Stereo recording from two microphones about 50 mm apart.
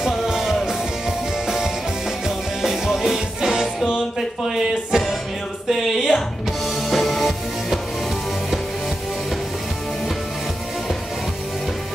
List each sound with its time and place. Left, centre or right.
0.0 s music: centre
2.2 s music: centre
4.4 s speech: centre
5.7 s music: centre